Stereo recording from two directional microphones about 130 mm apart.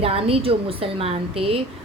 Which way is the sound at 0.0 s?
45° right (ahead or behind).